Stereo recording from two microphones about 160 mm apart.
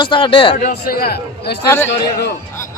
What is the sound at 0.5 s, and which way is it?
A man's voice, 65° left (ahead or behind).